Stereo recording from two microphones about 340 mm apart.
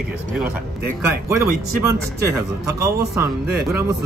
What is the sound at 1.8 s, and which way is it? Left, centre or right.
Speech, centre.